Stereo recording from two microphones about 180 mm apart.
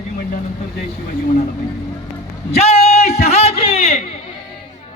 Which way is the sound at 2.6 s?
35° left (ahead or behind).